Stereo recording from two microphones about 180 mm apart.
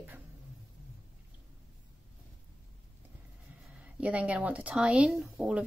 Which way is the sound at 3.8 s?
10° right (ahead or behind).